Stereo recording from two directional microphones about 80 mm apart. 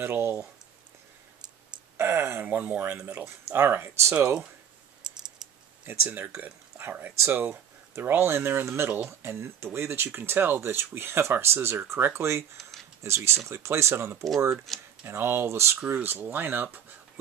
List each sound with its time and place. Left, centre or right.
0.0 s speech: right
2.0 s speech: right
5.9 s speech: right
14.7 s speech: centre
15.0 s speech: right